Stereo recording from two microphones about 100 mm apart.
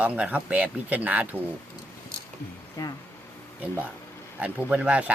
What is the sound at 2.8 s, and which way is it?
Speech, 35° left (ahead or behind).